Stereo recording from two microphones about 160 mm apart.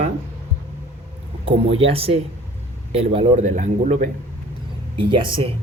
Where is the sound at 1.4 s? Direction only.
35° right (ahead or behind).